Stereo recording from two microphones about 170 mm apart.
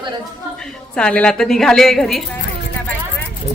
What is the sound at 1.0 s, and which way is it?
Speech, 5° left (ahead or behind).